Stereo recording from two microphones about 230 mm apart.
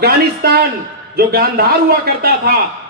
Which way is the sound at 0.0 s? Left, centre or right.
Right.